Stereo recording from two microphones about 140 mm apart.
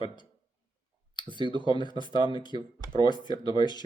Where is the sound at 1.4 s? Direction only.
35° left (ahead or behind).